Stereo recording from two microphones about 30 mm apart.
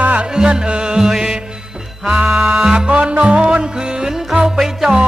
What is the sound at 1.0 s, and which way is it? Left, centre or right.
Music, centre.